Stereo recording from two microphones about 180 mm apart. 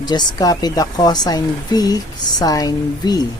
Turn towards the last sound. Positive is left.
turn(degrees=20)  # may be behind; listen again after turning